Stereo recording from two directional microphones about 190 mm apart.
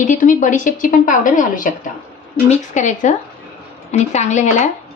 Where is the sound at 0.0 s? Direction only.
40° left (ahead or behind).